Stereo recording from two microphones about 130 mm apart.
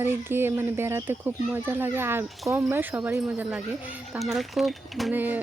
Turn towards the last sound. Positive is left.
turn(degrees=-15)  # may be behind; listen again after turning